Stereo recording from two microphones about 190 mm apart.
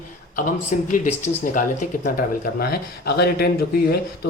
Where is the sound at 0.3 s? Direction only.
40° left (ahead or behind).